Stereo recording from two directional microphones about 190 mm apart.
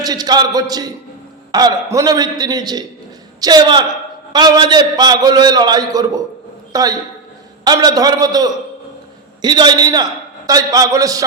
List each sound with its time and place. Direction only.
0.0 s a man's voice: 20° right (ahead or behind)